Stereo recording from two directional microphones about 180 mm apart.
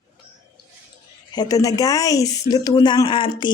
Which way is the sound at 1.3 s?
20° left (ahead or behind).